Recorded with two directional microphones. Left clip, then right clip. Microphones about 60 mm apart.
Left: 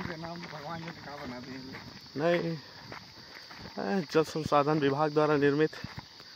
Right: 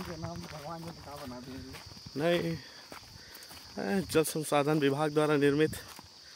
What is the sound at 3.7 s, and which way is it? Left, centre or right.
Speech, right.